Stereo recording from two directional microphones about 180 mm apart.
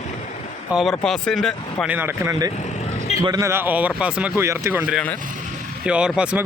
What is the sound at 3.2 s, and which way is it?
Speech, 20° right (ahead or behind).